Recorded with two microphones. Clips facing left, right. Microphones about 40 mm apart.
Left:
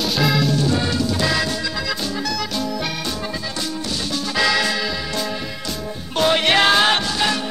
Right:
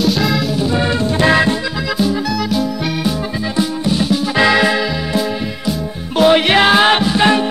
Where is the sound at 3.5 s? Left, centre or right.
Right.